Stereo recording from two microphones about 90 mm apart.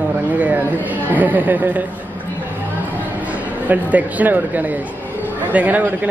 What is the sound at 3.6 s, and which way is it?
Speech, 20° right (ahead or behind).